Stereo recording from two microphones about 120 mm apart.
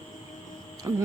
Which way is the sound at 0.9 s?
20° right (ahead or behind).